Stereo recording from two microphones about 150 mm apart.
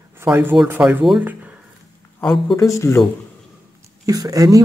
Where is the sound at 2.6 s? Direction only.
20° left (ahead or behind).